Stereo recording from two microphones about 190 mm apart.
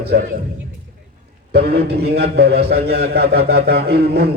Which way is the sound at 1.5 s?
55° right (ahead or behind).